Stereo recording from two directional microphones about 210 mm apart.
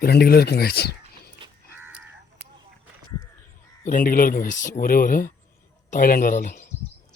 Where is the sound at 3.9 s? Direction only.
40° left (ahead or behind).